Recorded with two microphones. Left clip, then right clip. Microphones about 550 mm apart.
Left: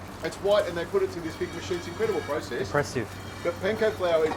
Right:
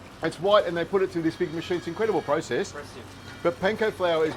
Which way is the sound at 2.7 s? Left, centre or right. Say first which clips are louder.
Left 13 dB; left.